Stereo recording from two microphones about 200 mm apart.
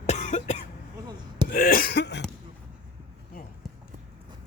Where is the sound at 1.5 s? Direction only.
45° left (ahead or behind).